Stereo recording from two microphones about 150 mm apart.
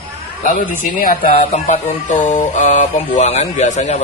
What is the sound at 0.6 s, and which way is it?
Speech, 70° left (ahead or behind).